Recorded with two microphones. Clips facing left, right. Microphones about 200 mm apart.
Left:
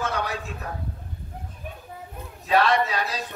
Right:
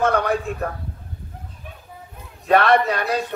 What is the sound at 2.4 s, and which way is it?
Speech, 55° right (ahead or behind).